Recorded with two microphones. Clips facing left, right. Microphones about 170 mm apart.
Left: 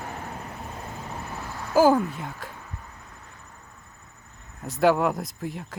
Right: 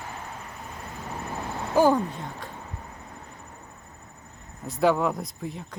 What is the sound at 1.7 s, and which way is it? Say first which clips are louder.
Speech: left 2 dB; 5° left (ahead or behind).